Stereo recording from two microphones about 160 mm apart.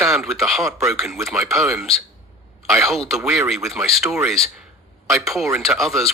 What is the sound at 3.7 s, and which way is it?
A man's voice, centre (ahead or behind).